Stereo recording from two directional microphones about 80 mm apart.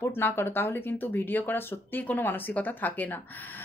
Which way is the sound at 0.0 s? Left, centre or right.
Left.